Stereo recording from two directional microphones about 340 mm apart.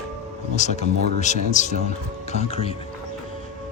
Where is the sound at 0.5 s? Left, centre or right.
Left.